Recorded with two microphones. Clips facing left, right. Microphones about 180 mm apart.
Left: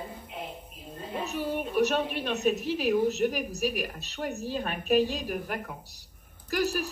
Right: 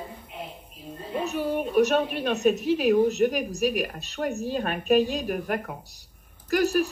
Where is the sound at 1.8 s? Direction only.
50° right (ahead or behind).